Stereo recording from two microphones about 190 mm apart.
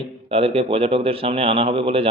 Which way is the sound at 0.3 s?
30° right (ahead or behind).